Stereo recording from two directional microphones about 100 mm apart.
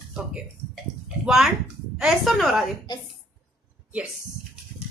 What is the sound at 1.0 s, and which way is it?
Bathtub, 5° right (ahead or behind).